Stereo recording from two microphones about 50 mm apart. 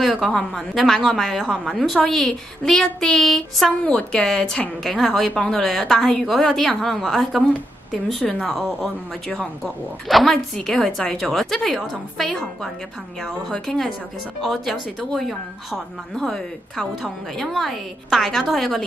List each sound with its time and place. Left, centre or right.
0.0 s a woman's voice: centre
3.8 s a woman's voice: left
4.2 s a woman's voice: centre
4.8 s a woman's voice: centre